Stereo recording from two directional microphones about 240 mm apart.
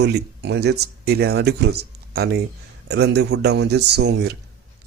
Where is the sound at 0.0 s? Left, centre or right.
Right.